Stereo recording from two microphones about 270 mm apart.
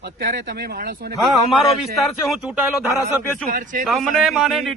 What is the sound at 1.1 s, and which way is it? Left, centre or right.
A man's voice, centre.